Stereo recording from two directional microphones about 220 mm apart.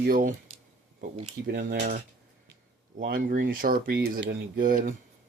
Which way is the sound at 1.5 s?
40° right (ahead or behind).